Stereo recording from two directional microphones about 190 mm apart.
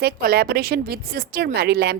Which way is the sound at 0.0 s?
55° right (ahead or behind).